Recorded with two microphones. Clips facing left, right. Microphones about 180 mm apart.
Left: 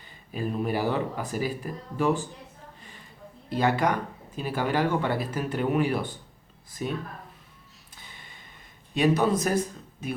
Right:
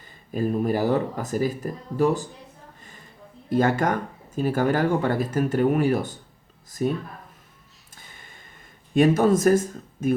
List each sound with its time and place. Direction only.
0.3 s speech: 45° right (ahead or behind)
3.5 s speech: 45° right (ahead or behind)
7.9 s a sound: 45° right (ahead or behind)
9.0 s speech: 45° right (ahead or behind)